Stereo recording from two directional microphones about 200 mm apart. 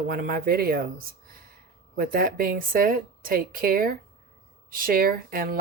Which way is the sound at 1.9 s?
45° right (ahead or behind).